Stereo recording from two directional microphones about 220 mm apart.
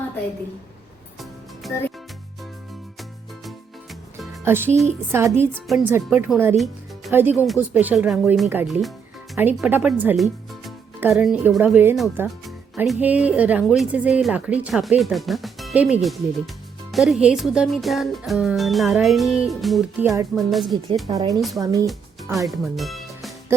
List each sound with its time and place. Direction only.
1.6 s music: centre (ahead or behind)
4.4 s speech: 10° right (ahead or behind)
21.1 s speech: 15° right (ahead or behind)
21.8 s music: centre (ahead or behind)
22.4 s speech: centre (ahead or behind)